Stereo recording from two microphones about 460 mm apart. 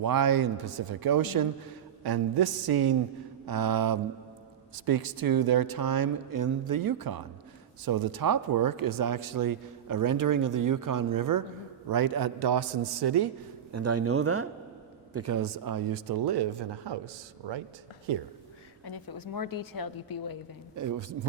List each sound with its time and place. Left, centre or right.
0.0 s speech: right
13.7 s speech: right
18.9 s a woman's voice: left
20.7 s a man's voice: right